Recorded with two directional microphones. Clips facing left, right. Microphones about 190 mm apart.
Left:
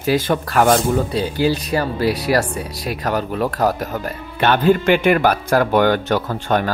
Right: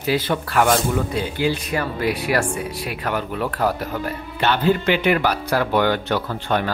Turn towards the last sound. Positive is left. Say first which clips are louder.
# left 3 dB
turn(degrees=45)  # may be behind; listen again after turning